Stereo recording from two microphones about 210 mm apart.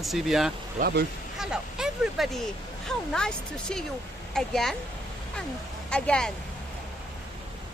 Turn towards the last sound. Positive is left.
turn(degrees=5)  # may be behind; listen again after turning